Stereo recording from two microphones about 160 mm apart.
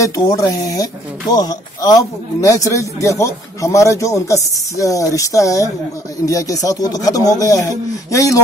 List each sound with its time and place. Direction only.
0.0 s a man's voice: 20° left (ahead or behind)